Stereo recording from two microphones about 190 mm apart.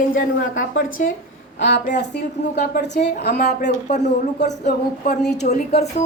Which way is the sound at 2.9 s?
60° left (ahead or behind).